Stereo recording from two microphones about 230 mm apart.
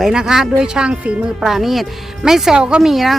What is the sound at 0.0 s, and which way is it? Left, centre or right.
Speech, centre.